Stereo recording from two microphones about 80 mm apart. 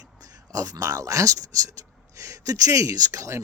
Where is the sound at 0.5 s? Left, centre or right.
Right.